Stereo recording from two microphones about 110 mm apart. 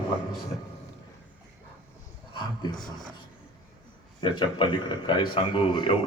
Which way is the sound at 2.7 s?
5° left (ahead or behind).